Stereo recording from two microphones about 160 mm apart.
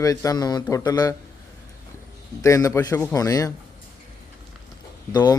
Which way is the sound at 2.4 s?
20° left (ahead or behind).